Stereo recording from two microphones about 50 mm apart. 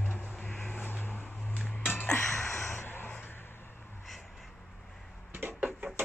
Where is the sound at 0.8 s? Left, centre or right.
Left.